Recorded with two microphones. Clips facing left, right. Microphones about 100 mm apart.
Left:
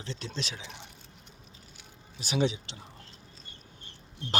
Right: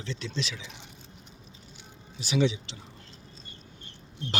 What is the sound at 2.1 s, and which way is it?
Speech, 45° left (ahead or behind).